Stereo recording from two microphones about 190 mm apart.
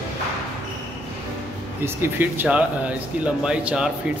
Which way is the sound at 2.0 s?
10° right (ahead or behind).